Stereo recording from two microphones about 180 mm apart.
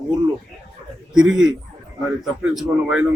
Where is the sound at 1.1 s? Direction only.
5° right (ahead or behind).